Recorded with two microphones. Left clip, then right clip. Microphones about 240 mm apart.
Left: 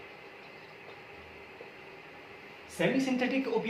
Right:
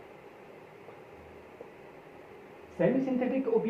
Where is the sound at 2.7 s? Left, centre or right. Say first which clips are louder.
Right 1 dB; left.